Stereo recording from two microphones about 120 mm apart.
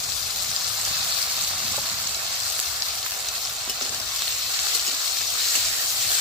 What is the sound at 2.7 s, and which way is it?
Frying, 5° right (ahead or behind).